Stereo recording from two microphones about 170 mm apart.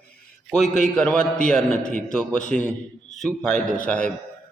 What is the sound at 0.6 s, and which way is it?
Speech, 45° left (ahead or behind).